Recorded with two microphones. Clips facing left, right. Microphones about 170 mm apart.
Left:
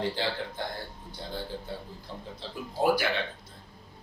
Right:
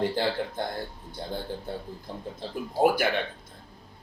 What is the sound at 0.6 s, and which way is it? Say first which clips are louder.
A man's voice: right 4 dB; 50° right (ahead or behind).